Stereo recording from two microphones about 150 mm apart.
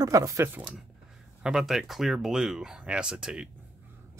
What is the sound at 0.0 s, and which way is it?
Speech, 20° right (ahead or behind).